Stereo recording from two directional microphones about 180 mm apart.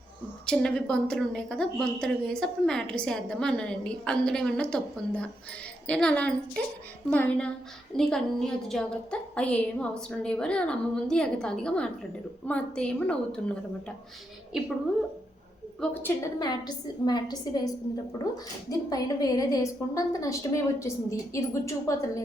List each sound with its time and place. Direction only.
0.4 s a woman's voice: 5° left (ahead or behind)
14.5 s a woman's voice: 5° right (ahead or behind)
15.8 s a woman's voice: 5° left (ahead or behind)
16.4 s a woman's voice: 25° left (ahead or behind)
18.7 s a woman's voice: 20° left (ahead or behind)